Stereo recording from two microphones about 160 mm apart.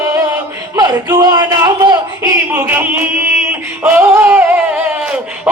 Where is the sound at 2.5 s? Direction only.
10° right (ahead or behind).